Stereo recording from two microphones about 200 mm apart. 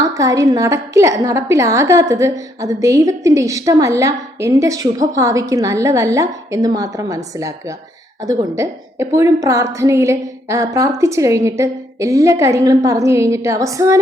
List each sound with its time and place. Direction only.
0.0 s a woman's voice: 15° right (ahead or behind)
8.2 s a woman's voice: 15° right (ahead or behind)